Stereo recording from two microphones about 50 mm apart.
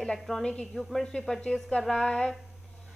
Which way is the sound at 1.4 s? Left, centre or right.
Centre.